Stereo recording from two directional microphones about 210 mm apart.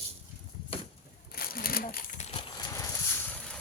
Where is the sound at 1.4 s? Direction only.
45° left (ahead or behind).